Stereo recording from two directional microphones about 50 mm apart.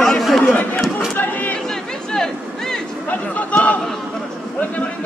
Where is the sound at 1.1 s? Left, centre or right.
Left.